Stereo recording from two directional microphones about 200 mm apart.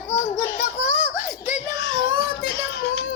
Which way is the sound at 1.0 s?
5° right (ahead or behind).